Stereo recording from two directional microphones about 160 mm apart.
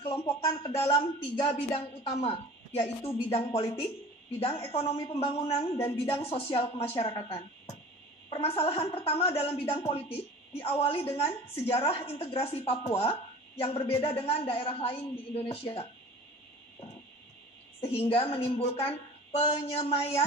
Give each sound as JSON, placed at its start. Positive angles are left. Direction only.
{"t": 0.0, "sound": "a woman's voice", "side_deg": 35}
{"t": 8.3, "sound": "a woman's voice", "side_deg": 35}
{"t": 17.7, "sound": "a sound", "side_deg": 35}
{"t": 18.1, "sound": "a woman's voice", "side_deg": 35}